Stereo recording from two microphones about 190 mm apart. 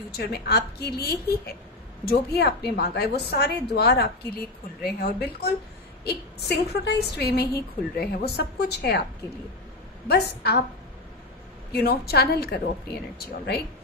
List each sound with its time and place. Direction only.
0.2 s a woman's voice: 60° left (ahead or behind)
10.0 s a woman's voice: 60° left (ahead or behind)
11.7 s a woman's voice: 55° left (ahead or behind)